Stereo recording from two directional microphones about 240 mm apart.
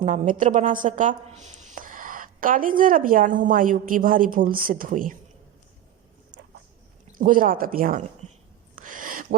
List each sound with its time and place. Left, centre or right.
0.0 s a woman's voice: right
7.1 s a woman's voice: right
8.2 s a sound: right